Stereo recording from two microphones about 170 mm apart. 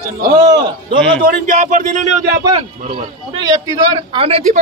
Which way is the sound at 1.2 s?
55° right (ahead or behind).